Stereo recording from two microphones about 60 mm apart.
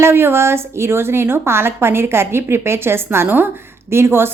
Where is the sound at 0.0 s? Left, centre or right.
Right.